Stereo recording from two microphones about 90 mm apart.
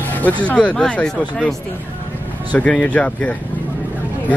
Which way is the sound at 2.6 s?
10° left (ahead or behind).